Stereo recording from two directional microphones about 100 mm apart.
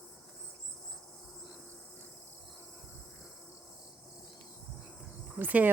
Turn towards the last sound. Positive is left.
turn(degrees=-20)  # may be behind; listen again after turning